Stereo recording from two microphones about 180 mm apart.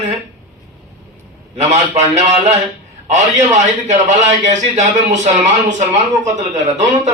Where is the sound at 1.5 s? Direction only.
40° right (ahead or behind).